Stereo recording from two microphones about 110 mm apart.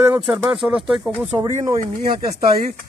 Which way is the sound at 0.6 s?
5° right (ahead or behind).